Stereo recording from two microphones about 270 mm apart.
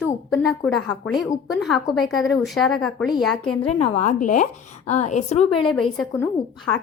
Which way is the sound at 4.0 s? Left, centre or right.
Left.